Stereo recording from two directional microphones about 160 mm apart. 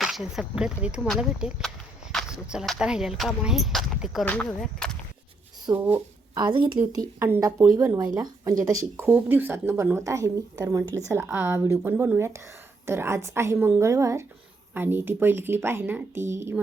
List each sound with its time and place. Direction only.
0.0 s speech: centre (ahead or behind)
5.6 s speech: 15° right (ahead or behind)
6.4 s a woman's voice: 30° right (ahead or behind)
8.8 s a woman's voice: 15° right (ahead or behind)